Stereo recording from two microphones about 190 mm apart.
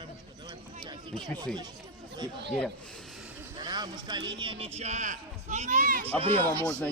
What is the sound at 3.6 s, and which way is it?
Speech, 25° right (ahead or behind).